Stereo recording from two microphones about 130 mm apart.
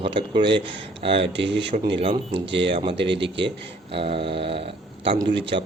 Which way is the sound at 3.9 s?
45° right (ahead or behind).